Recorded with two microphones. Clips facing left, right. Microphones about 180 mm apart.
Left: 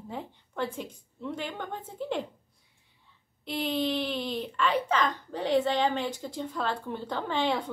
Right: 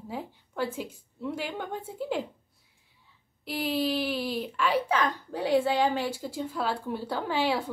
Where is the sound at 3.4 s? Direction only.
5° right (ahead or behind).